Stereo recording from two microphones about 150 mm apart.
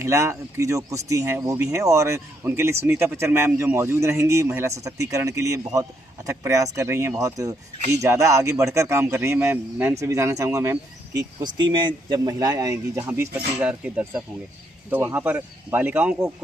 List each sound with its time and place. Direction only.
0.0 s speech: 20° right (ahead or behind)